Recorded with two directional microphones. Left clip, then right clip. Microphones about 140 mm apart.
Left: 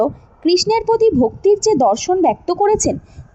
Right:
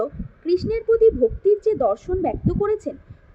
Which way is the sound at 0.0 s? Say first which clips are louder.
Left 9 dB; 55° left (ahead or behind).